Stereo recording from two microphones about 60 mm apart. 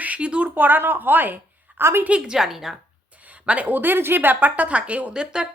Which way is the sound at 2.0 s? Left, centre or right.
Centre.